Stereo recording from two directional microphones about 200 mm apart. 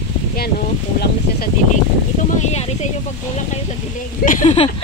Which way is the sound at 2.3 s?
35° left (ahead or behind).